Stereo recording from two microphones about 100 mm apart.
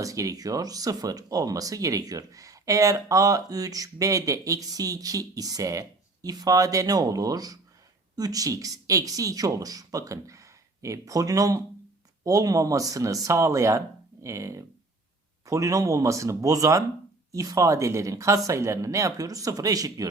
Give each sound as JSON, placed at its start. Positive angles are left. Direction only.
{"t": 0.0, "sound": "speech", "side_deg": -35}